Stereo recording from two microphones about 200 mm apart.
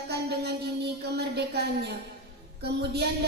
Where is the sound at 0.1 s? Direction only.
55° right (ahead or behind).